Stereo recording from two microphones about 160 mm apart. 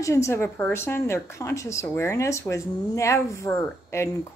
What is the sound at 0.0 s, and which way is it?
Speech, 20° left (ahead or behind).